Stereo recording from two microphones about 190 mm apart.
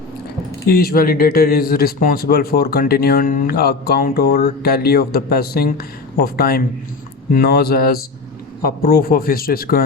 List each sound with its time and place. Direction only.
0.7 s a man's voice: 50° left (ahead or behind)